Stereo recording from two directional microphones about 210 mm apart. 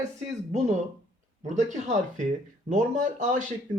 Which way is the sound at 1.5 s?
35° right (ahead or behind).